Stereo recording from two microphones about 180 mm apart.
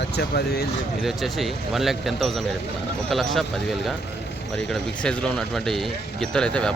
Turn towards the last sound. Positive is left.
turn(degrees=5)  # may be behind; listen again after turning